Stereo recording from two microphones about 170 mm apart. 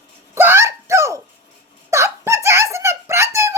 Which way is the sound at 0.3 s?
15° right (ahead or behind).